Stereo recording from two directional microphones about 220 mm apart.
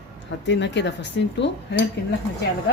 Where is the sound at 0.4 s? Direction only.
55° left (ahead or behind).